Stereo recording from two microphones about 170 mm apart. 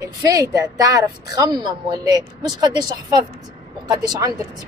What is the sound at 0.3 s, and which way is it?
Speech, 20° right (ahead or behind).